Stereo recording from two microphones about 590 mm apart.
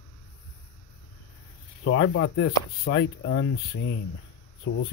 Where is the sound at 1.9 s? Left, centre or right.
Centre.